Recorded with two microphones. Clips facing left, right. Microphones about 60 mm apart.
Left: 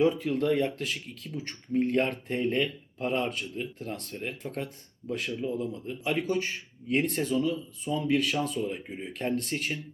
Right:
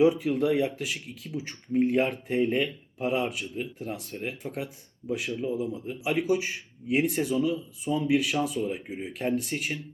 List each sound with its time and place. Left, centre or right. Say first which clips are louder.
0.0 s speech: right 3 dB; centre